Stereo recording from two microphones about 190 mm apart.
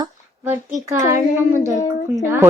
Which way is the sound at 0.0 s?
10° right (ahead or behind).